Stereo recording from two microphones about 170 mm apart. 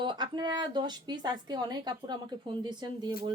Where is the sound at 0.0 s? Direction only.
25° right (ahead or behind).